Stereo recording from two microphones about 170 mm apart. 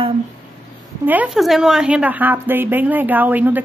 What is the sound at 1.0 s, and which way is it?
A woman's voice, 10° right (ahead or behind).